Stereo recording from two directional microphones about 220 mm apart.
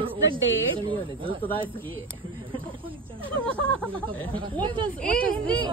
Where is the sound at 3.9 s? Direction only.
20° right (ahead or behind).